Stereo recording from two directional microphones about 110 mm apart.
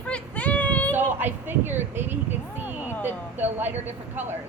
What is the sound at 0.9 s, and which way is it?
A woman's voice, 20° right (ahead or behind).